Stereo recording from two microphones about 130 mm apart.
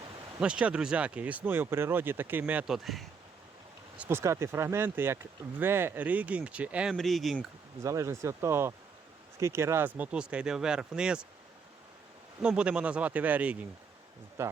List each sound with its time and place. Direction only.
0.3 s speech: 10° right (ahead or behind)
2.7 s speech: centre (ahead or behind)
3.9 s a sound: 10° right (ahead or behind)
4.2 s speech: 20° right (ahead or behind)
6.9 s speech: centre (ahead or behind)
7.8 s speech: 20° right (ahead or behind); by 11.2 s 5° right (ahead or behind)
12.4 s speech: 10° right (ahead or behind)